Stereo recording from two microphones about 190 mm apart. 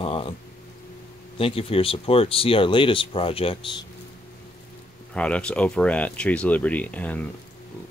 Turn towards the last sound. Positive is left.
turn(degrees=10)  # may be behind; listen again after turning